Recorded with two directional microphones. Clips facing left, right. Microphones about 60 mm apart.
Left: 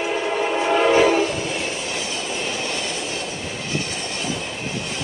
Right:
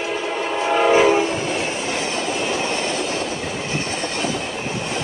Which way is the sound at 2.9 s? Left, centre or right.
Right.